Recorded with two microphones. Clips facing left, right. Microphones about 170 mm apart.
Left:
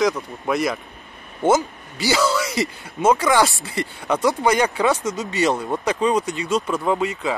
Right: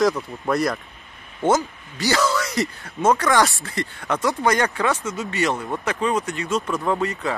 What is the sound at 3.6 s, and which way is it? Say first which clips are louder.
Speech: left 2 dB; 15° left (ahead or behind).